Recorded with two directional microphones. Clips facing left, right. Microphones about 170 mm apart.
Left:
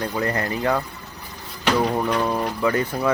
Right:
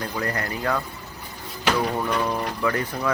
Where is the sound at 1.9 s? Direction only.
25° left (ahead or behind).